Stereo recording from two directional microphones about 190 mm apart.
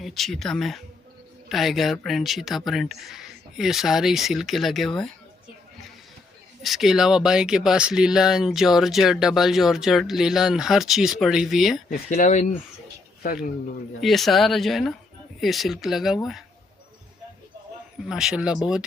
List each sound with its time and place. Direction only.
0.0 s speech: centre (ahead or behind)
6.6 s speech: centre (ahead or behind)
11.9 s speech: 45° left (ahead or behind)
14.0 s speech: centre (ahead or behind)
18.0 s speech: 5° right (ahead or behind)